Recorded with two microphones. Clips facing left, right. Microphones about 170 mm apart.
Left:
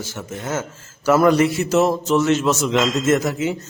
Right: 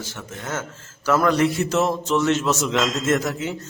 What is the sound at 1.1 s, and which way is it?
A man's voice, 10° left (ahead or behind).